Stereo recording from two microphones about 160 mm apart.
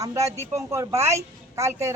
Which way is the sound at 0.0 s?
20° right (ahead or behind).